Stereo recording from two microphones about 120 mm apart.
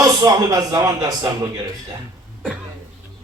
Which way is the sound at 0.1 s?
30° right (ahead or behind).